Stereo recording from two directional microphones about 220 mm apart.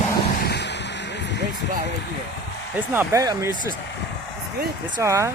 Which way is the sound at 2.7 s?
10° right (ahead or behind).